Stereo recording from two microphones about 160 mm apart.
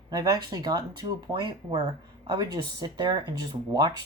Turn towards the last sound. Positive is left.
turn(degrees=-25)  # may be behind; listen again after turning